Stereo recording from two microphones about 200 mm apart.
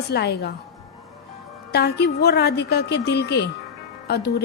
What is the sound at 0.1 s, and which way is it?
Speech, 55° left (ahead or behind).